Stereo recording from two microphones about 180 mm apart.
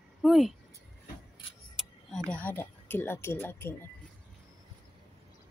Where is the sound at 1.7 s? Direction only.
5° left (ahead or behind).